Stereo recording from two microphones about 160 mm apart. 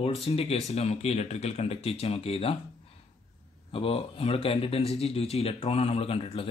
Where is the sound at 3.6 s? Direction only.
35° left (ahead or behind).